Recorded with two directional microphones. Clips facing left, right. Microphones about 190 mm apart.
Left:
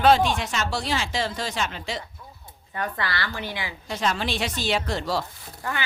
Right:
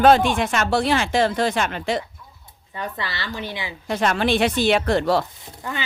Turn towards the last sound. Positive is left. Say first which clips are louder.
# right 1 dB
turn(degrees=-20)  # may be behind; listen again after turning